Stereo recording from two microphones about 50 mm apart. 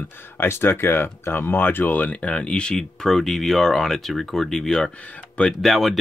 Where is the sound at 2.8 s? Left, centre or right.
Centre.